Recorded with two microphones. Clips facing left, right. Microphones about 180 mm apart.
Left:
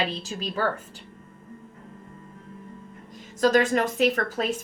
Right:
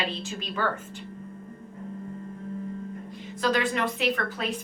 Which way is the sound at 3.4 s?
45° left (ahead or behind).